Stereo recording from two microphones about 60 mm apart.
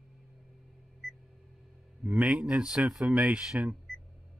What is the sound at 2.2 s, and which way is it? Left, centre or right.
Speech, centre.